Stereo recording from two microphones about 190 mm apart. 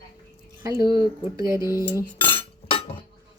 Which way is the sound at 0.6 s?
20° right (ahead or behind).